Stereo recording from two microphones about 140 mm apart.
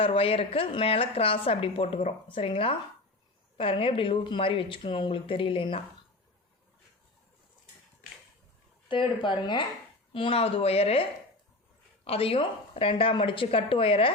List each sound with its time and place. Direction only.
0.0 s a woman's voice: 40° left (ahead or behind)
8.9 s a woman's voice: 35° left (ahead or behind)
12.0 s speech: 40° left (ahead or behind)